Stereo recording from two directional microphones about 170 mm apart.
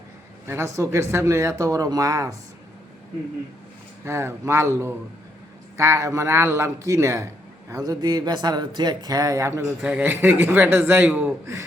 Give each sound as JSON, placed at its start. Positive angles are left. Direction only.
{"t": 0.4, "sound": "speech", "side_deg": -15}
{"t": 4.0, "sound": "speech", "side_deg": -15}
{"t": 5.7, "sound": "speech", "side_deg": -15}